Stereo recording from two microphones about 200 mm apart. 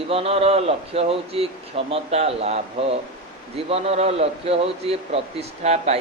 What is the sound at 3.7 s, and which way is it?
A man's voice, 30° right (ahead or behind).